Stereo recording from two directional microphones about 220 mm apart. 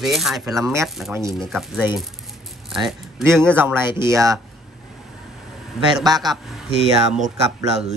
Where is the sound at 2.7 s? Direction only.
Centre (ahead or behind).